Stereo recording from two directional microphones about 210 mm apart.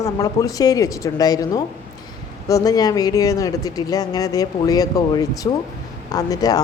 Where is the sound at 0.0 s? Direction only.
15° left (ahead or behind).